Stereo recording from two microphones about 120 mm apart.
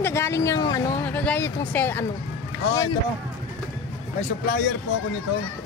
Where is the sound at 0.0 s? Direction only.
20° left (ahead or behind).